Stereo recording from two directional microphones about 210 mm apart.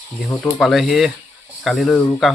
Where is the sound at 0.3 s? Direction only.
Centre (ahead or behind).